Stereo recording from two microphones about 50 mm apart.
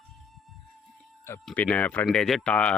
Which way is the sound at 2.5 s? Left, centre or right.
Left.